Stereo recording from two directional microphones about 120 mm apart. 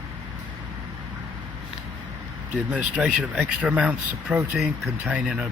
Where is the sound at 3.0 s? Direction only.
5° right (ahead or behind).